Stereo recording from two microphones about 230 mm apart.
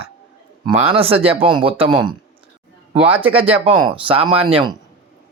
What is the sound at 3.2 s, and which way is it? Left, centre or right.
Speech, right.